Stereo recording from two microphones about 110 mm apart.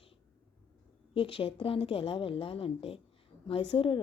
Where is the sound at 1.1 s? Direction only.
55° left (ahead or behind).